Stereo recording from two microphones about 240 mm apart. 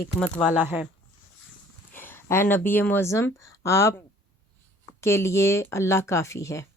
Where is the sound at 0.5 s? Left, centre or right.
Centre.